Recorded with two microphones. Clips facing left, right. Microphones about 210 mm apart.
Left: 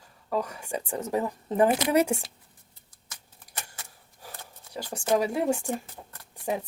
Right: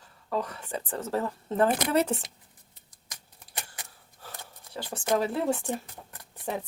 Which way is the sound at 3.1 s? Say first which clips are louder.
Right 1 dB; 15° right (ahead or behind).